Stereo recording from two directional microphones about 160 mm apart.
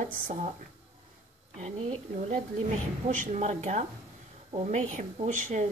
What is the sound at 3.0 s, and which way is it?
Speech, 50° right (ahead or behind).